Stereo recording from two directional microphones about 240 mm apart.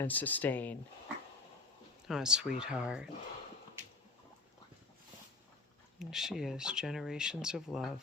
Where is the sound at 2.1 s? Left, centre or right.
Centre.